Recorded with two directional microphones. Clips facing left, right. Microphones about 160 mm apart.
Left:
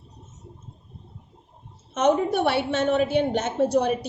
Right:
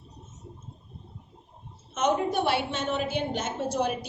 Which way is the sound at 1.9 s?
65° left (ahead or behind).